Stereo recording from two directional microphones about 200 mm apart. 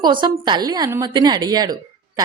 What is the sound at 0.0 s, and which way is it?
A woman's voice, 20° right (ahead or behind).